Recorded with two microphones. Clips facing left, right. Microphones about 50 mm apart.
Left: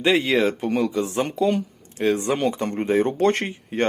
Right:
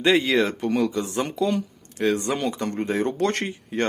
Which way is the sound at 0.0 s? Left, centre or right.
Centre.